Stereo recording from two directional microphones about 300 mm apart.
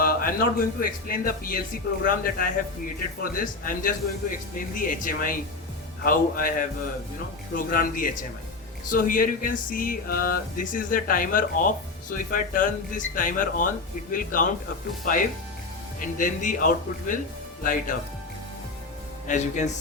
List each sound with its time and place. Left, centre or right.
0.0 s speech: left
19.3 s speech: left